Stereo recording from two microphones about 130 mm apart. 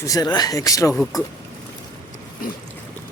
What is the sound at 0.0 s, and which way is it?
Speech, 30° left (ahead or behind).